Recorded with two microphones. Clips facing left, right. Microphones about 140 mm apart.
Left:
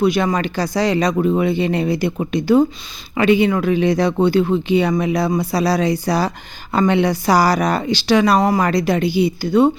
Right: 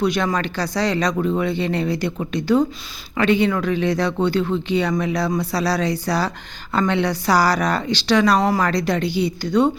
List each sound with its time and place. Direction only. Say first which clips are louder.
0.0 s speech: left 3 dB; 5° left (ahead or behind)